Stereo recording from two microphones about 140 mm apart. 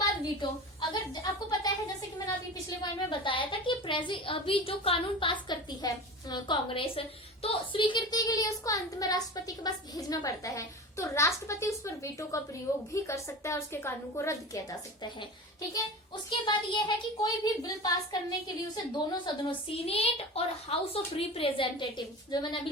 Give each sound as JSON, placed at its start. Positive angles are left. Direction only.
{"t": 0.0, "sound": "speech", "side_deg": 30}
{"t": 3.1, "sound": "a woman's voice", "side_deg": 35}
{"t": 16.5, "sound": "speech", "side_deg": 35}
{"t": 19.2, "sound": "a woman's voice", "side_deg": 40}